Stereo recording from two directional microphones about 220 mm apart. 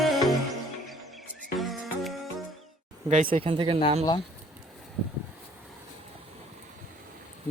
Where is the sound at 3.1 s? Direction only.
35° right (ahead or behind).